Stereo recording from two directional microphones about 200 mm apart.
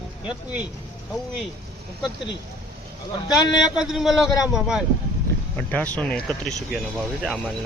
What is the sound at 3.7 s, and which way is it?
Speech, 5° right (ahead or behind).